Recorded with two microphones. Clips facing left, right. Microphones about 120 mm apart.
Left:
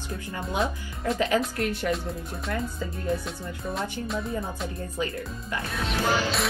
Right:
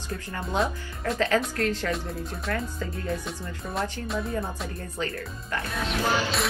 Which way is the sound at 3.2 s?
Centre (ahead or behind).